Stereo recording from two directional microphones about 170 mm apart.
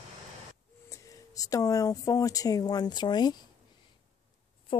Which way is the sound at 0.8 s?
20° left (ahead or behind).